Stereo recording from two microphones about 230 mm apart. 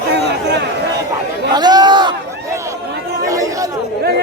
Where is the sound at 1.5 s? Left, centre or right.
Centre.